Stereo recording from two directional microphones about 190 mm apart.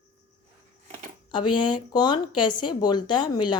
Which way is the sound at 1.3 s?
25° left (ahead or behind).